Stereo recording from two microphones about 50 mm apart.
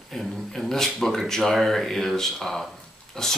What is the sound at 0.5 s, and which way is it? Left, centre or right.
Speech, centre.